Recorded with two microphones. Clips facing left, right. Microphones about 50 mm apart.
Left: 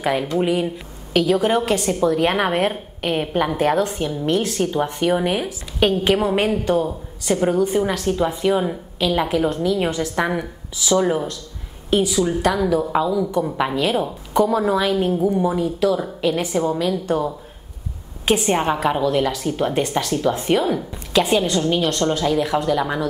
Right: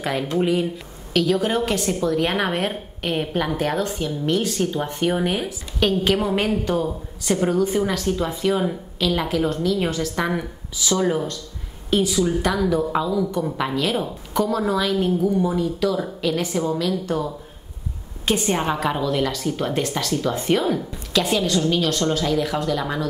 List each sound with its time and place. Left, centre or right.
0.0 s a woman's voice: centre
5.0 s a woman's voice: centre; by 10.1 s left
10.1 s a woman's voice: centre
15.3 s a woman's voice: centre